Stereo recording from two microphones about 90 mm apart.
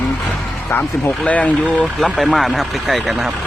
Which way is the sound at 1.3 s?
15° left (ahead or behind).